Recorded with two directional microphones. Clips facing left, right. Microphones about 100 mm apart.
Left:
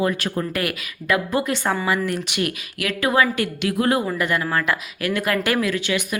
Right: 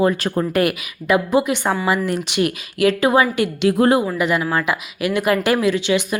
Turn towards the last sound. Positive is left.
turn(degrees=-25)  # may be behind; listen again after turning